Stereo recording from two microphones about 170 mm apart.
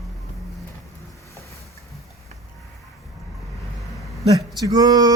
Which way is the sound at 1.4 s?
15° left (ahead or behind).